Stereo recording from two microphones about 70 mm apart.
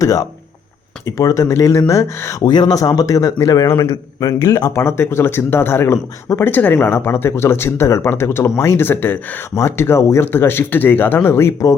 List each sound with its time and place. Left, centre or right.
0.0 s speech: left
2.4 s a man's voice: left
4.4 s a man's voice: left
4.7 s speech: left